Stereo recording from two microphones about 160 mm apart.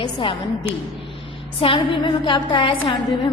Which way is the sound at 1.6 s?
35° left (ahead or behind).